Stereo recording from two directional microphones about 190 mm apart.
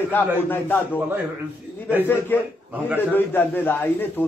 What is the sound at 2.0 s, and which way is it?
A man's voice, 10° left (ahead or behind).